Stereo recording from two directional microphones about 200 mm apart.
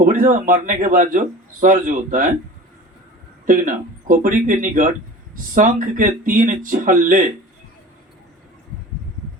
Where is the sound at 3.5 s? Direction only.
40° right (ahead or behind).